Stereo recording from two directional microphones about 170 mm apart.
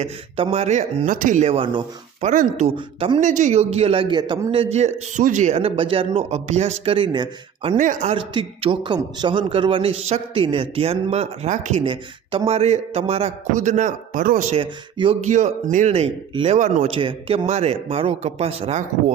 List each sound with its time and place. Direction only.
0.0 s a man's voice: 35° right (ahead or behind)
2.2 s speech: 45° right (ahead or behind)
2.6 s a man's voice: 30° right (ahead or behind)
3.2 s a man's voice: 45° right (ahead or behind); by 4.6 s 25° right (ahead or behind)
4.7 s a man's voice: 45° right (ahead or behind)
7.8 s speech: 45° right (ahead or behind)
8.3 s a man's voice: 30° right (ahead or behind); by 11.8 s 45° right (ahead or behind)
11.8 s a man's voice: 30° right (ahead or behind); by 14.5 s 50° right (ahead or behind)
14.5 s a man's voice: 30° right (ahead or behind)
15.7 s a man's voice: 40° right (ahead or behind)
16.9 s a man's voice: 30° right (ahead or behind)